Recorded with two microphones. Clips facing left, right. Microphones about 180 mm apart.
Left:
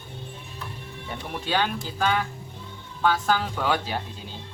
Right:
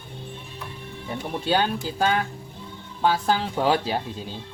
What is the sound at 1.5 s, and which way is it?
Speech, 35° right (ahead or behind).